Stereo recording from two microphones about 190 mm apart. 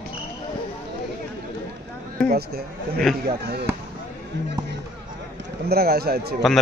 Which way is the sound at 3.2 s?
55° right (ahead or behind).